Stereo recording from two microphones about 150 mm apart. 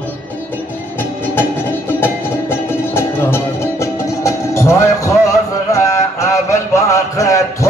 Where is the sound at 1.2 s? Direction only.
15° left (ahead or behind).